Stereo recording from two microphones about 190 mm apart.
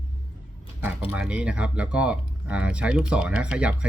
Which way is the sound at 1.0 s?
5° right (ahead or behind).